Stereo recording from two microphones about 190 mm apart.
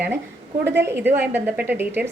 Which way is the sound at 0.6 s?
65° right (ahead or behind).